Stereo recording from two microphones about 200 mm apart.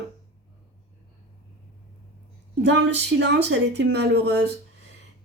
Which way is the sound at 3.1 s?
60° right (ahead or behind).